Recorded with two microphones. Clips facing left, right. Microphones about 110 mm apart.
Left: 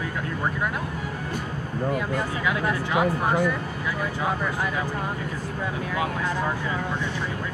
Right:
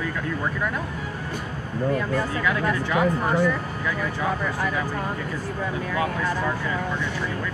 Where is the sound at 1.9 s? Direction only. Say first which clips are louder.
Right 3 dB; 15° left (ahead or behind).